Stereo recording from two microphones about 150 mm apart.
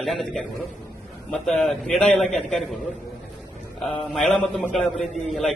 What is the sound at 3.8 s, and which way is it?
A man's voice, 5° left (ahead or behind).